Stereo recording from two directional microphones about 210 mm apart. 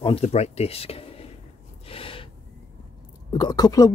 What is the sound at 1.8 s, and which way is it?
Gasp, 25° left (ahead or behind).